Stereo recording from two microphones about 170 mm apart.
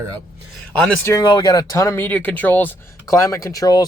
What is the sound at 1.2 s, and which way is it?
Speech, 25° left (ahead or behind).